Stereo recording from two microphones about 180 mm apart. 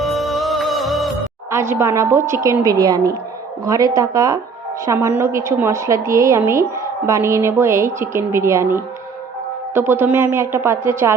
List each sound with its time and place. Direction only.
0.0 s music: centre (ahead or behind)
1.5 s a woman's voice: 15° right (ahead or behind)